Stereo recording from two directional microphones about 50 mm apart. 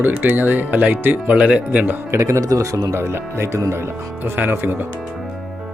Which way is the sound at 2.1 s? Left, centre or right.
Right.